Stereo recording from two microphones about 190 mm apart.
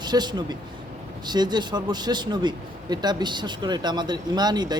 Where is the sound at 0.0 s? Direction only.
20° right (ahead or behind).